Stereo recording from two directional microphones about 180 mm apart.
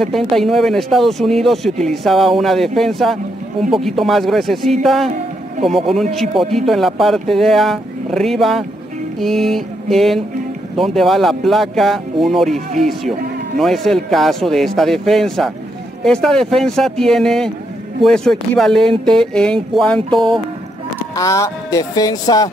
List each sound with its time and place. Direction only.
0.0 s speech: centre (ahead or behind)
6.5 s speech: centre (ahead or behind)
21.2 s speech: 20° left (ahead or behind)